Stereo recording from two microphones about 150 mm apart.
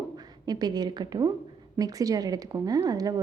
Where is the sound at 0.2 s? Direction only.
25° right (ahead or behind).